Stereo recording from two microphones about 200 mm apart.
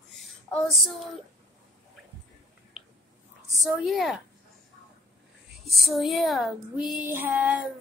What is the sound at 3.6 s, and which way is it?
Child singing, centre (ahead or behind).